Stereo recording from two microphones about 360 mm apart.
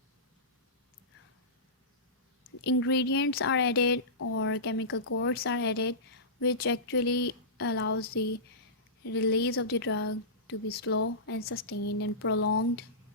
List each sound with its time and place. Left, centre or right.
2.6 s a woman's voice: left
11.9 s a woman's voice: left